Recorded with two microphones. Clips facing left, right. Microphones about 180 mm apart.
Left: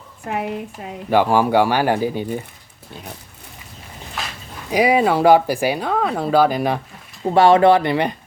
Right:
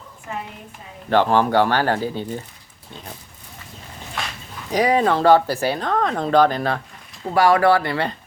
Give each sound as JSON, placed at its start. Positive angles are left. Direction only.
{"t": 0.3, "sound": "a woman's voice", "side_deg": 80}
{"t": 1.1, "sound": "speech", "side_deg": 10}
{"t": 4.7, "sound": "speech", "side_deg": 10}
{"t": 7.3, "sound": "speech", "side_deg": 25}